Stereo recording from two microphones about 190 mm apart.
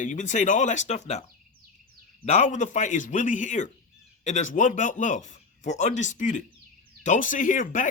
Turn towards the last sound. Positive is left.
turn(degrees=45)  # may be behind; listen again after turning